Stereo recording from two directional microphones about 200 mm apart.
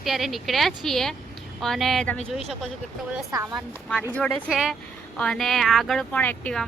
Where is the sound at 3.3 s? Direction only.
15° right (ahead or behind).